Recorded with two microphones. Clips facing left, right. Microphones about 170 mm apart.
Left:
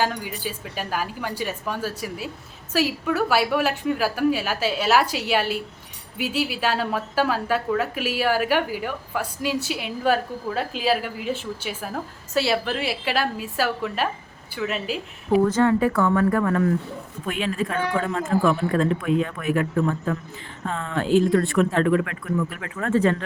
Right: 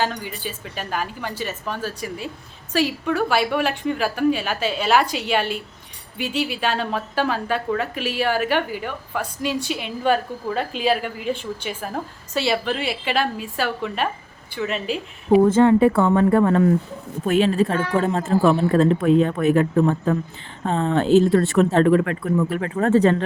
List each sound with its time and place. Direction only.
0.0 s a woman's voice: 10° left (ahead or behind)
15.4 s speech: 25° right (ahead or behind)